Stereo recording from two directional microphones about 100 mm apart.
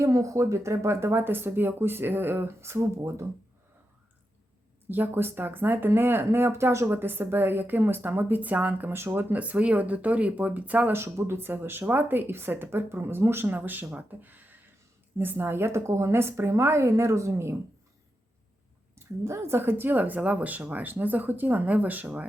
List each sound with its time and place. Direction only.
0.0 s speech: 30° right (ahead or behind)
4.9 s speech: 20° right (ahead or behind)
18.9 s speech: 30° right (ahead or behind)